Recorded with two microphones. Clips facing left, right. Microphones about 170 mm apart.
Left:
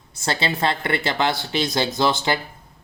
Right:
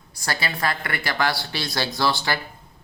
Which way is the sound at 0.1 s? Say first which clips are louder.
Left 4 dB; 25° left (ahead or behind).